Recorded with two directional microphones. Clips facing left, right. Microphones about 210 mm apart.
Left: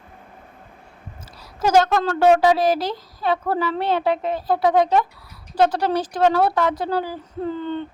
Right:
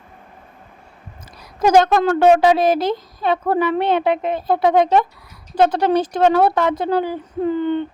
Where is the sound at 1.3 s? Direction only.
15° right (ahead or behind).